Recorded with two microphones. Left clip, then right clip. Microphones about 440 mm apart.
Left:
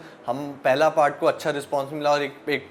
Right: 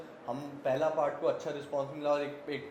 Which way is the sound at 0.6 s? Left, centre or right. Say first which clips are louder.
Left 11 dB; left.